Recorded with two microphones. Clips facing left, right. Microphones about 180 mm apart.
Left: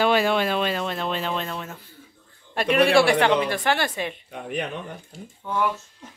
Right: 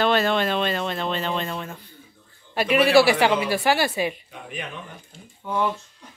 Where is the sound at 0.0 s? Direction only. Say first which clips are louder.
Even; 10° left (ahead or behind).